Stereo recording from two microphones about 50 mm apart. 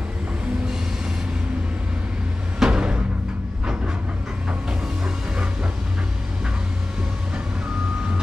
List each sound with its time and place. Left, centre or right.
2.6 s music: centre
4.5 s music: centre